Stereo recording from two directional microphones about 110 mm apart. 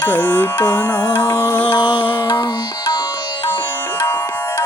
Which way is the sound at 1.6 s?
45° left (ahead or behind).